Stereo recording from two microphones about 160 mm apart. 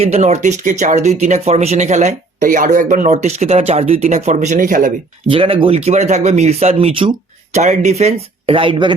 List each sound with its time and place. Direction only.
0.0 s speech: 40° right (ahead or behind)
5.3 s speech: 35° right (ahead or behind)
7.6 s speech: 50° right (ahead or behind); by 9.0 s 30° right (ahead or behind)